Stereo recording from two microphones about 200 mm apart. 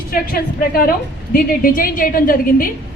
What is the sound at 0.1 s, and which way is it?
A woman's voice, 45° left (ahead or behind).